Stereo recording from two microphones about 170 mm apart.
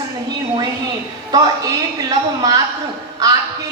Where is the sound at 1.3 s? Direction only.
20° right (ahead or behind).